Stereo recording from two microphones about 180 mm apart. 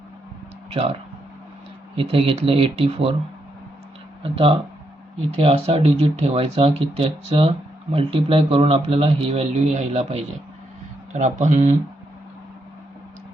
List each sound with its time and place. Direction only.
0.7 s speech: 30° right (ahead or behind)
2.0 s speech: 30° right (ahead or behind)
4.2 s speech: 30° right (ahead or behind)